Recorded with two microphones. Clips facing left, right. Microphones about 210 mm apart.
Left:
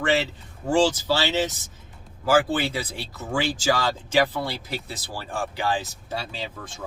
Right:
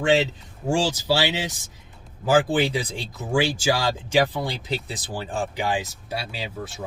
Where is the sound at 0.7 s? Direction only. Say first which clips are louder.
Left 2 dB; 10° right (ahead or behind).